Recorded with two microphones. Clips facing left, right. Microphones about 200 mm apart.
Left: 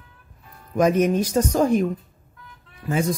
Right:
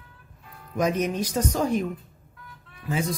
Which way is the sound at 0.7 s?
50° left (ahead or behind).